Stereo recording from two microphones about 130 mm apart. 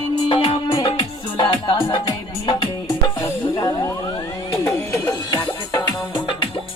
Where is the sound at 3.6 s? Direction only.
30° left (ahead or behind).